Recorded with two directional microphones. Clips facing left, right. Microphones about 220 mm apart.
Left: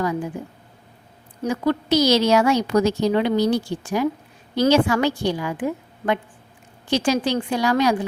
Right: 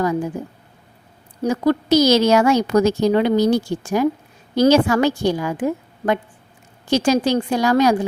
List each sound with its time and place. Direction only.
0.0 s a woman's voice: 45° right (ahead or behind)
1.4 s a woman's voice: 40° right (ahead or behind)